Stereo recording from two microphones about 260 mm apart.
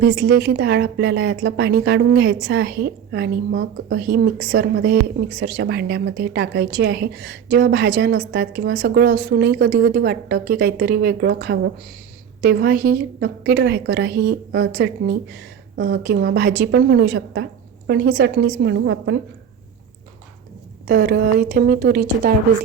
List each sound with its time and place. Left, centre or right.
0.0 s speech: right
20.8 s speech: right